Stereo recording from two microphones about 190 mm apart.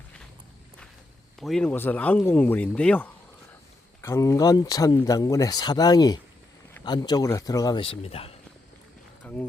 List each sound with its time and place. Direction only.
1.4 s speech: centre (ahead or behind); by 8.4 s 30° left (ahead or behind)
9.2 s speech: 5° left (ahead or behind)